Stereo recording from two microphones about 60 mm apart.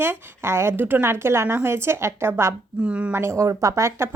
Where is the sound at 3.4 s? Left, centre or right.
Right.